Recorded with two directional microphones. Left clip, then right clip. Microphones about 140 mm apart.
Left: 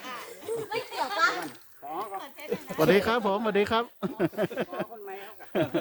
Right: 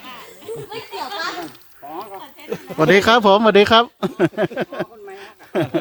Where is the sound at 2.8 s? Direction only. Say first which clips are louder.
Right 11 dB; 70° right (ahead or behind); by 5.6 s 45° right (ahead or behind).